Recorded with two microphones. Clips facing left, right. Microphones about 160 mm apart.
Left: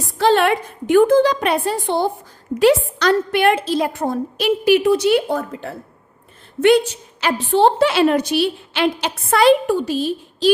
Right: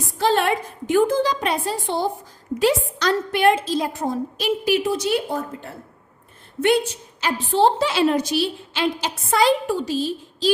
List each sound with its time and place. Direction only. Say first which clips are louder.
0.2 s a woman's voice: left 4 dB; 75° left (ahead or behind)